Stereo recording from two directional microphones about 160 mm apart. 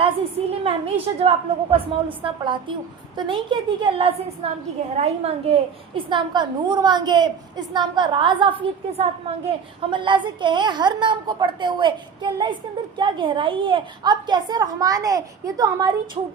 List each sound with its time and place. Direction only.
0.0 s a woman's voice: 35° right (ahead or behind)